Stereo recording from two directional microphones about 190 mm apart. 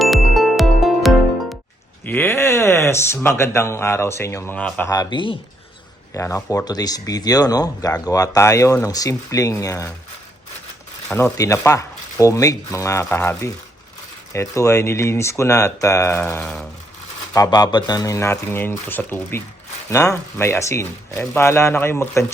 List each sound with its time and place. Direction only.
0.0 s music: centre (ahead or behind)
2.0 s speech: 10° left (ahead or behind)
4.9 s speech: 20° left (ahead or behind)
11.1 s speech: 15° left (ahead or behind)
17.3 s speech: 20° left (ahead or behind)